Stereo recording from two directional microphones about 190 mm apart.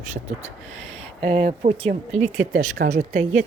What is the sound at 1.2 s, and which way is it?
Speech, 35° right (ahead or behind).